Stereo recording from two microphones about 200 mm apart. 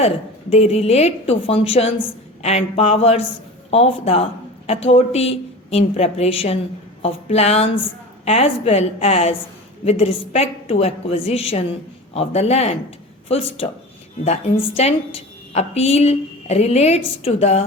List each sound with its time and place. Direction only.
0.5 s a woman's voice: 30° left (ahead or behind)
14.8 s a woman's voice: 30° left (ahead or behind)